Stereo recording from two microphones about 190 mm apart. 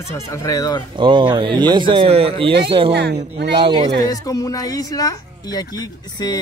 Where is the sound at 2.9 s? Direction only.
60° right (ahead or behind).